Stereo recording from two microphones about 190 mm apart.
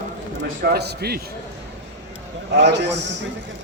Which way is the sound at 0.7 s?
55° right (ahead or behind).